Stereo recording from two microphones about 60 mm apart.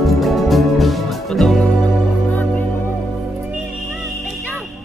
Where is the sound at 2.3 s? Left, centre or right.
Left.